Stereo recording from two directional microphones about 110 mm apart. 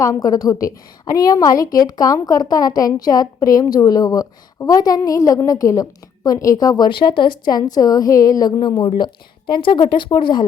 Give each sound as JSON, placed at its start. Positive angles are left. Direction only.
{"t": 0.0, "sound": "a woman's voice", "side_deg": 35}